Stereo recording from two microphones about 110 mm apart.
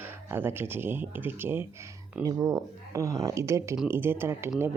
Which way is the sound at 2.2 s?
35° right (ahead or behind).